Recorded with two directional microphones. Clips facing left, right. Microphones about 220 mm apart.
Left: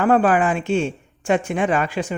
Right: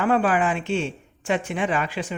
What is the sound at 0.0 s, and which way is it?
Speech, 45° left (ahead or behind).